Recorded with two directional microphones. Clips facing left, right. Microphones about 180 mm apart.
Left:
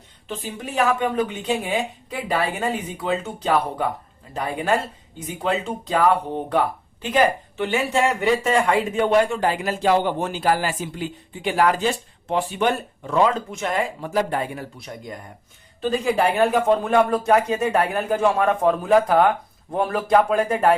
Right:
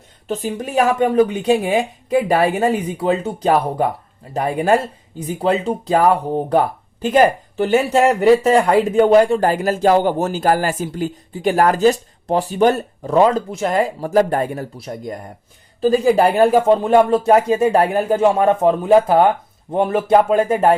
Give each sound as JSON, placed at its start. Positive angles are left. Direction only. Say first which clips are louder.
{"t": 0.3, "sound": "speech", "louder": "right 8 dB", "side_deg": -40}